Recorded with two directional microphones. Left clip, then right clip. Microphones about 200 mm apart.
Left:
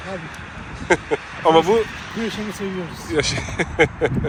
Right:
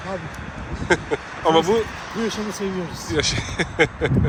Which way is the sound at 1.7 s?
35° right (ahead or behind).